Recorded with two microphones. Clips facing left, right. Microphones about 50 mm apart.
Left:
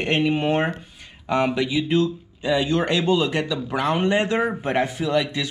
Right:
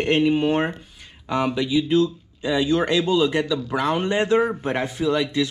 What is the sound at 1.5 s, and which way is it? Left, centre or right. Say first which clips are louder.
Speech: right 1 dB; left.